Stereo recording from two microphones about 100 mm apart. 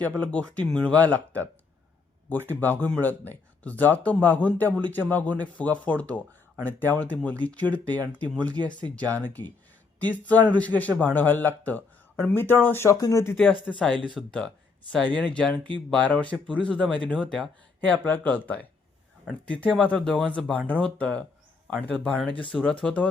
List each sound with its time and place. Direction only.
0.0 s speech: 10° left (ahead or behind)
2.5 s speech: 20° left (ahead or behind); by 13.3 s 35° left (ahead or behind)
13.7 s speech: 10° left (ahead or behind)
18.0 s speech: 15° left (ahead or behind)